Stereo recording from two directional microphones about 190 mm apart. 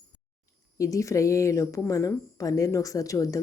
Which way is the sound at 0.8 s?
15° left (ahead or behind).